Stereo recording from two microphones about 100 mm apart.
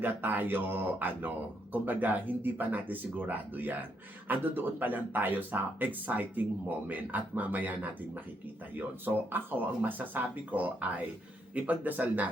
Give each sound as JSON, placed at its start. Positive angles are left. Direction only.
{"t": 0.0, "sound": "a man's voice", "side_deg": -20}